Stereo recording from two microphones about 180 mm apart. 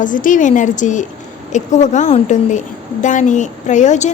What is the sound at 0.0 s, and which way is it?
A woman's voice, 45° left (ahead or behind).